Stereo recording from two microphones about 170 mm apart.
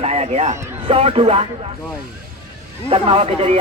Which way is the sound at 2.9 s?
35° right (ahead or behind).